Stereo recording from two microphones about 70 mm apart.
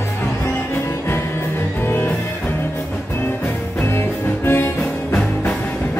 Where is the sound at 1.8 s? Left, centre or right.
Left.